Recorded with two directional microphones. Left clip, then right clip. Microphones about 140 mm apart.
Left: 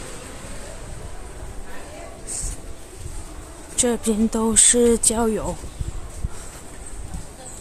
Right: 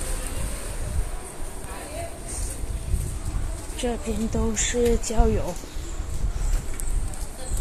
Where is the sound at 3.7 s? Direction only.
80° left; by 5.5 s 55° left (ahead or behind).